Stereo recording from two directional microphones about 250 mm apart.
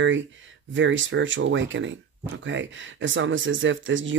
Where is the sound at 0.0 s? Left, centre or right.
Right.